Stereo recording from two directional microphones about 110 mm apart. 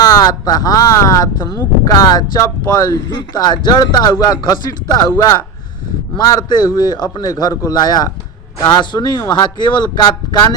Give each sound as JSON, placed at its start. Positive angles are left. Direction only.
{"t": 0.0, "sound": "speech", "side_deg": 30}